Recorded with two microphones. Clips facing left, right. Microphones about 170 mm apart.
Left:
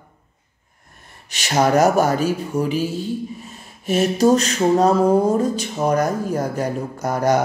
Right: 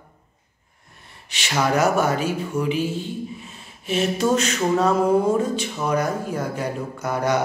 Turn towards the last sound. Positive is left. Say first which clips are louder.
# left 4 dB
turn(degrees=40)  # may be behind; listen again after turning